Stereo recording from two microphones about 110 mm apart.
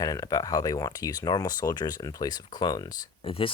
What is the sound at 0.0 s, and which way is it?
Speech, 30° left (ahead or behind).